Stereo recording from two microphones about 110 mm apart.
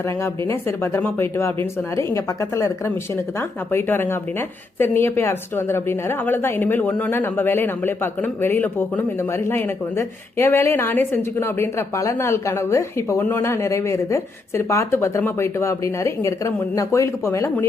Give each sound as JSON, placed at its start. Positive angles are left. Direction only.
{"t": 0.4, "sound": "a woman's voice", "side_deg": 25}